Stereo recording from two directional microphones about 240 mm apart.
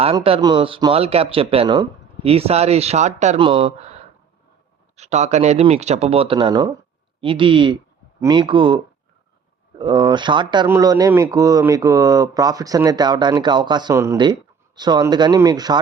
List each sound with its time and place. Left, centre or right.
0.0 s speech: right
4.9 s speech: right